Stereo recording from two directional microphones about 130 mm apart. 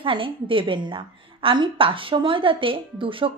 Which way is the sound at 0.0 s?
40° right (ahead or behind).